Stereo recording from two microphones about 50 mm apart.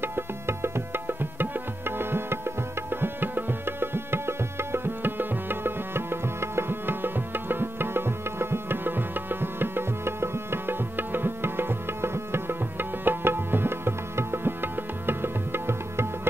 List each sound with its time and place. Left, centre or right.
0.0 s music: right